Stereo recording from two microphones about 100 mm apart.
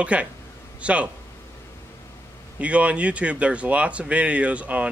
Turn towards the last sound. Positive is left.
turn(degrees=-15)  # may be behind; listen again after turning